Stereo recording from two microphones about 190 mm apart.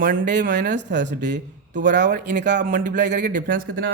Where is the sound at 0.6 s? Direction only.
65° right (ahead or behind).